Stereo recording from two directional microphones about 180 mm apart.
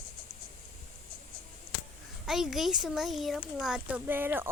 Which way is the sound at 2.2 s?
Centre (ahead or behind).